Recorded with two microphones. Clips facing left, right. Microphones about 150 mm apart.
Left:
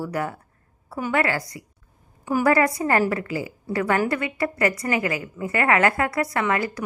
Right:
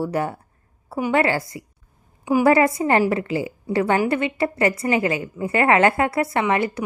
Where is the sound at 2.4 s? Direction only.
25° right (ahead or behind).